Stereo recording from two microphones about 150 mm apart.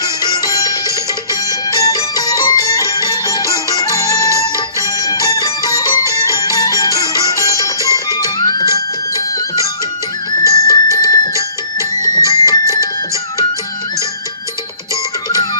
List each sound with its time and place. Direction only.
0.0 s music: 25° left (ahead or behind)
10.4 s music: 20° left (ahead or behind)